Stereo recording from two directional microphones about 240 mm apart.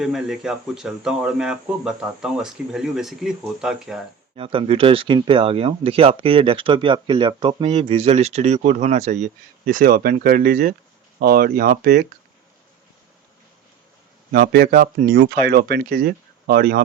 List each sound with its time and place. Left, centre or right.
0.0 s speech: centre
4.4 s speech: right
14.3 s speech: right